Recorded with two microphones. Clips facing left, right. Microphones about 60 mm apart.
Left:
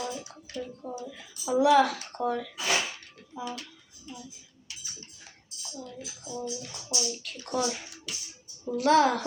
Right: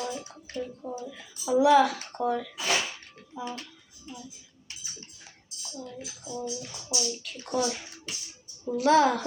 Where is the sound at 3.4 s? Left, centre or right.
Right.